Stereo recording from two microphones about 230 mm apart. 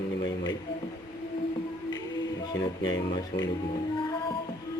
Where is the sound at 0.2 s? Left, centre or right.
Centre.